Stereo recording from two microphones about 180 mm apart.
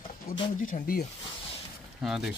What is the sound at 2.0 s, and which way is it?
Speech, centre (ahead or behind).